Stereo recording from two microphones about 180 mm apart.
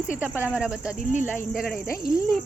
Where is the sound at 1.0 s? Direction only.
45° left (ahead or behind).